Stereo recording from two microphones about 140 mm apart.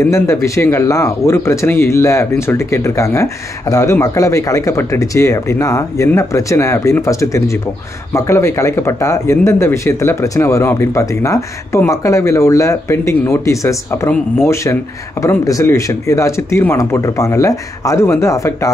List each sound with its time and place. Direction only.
0.0 s speech: 20° left (ahead or behind)